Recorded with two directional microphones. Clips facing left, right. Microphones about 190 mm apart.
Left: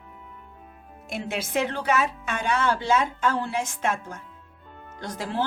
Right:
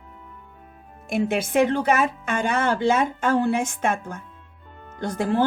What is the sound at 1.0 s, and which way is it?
Speech, 50° right (ahead or behind).